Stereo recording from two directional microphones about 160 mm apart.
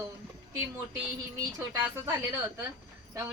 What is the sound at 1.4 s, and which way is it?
Speech, 20° right (ahead or behind).